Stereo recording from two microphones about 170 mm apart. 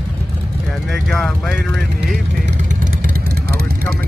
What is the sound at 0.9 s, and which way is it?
Speech, 5° left (ahead or behind).